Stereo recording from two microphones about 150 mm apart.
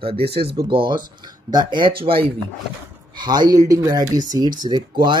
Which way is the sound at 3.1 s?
30° right (ahead or behind).